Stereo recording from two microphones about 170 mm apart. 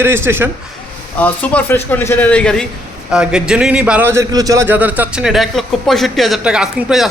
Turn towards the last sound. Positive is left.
turn(degrees=-5)  # may be behind; listen again after turning